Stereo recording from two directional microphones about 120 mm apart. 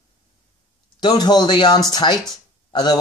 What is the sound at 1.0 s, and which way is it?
Speech, 35° left (ahead or behind).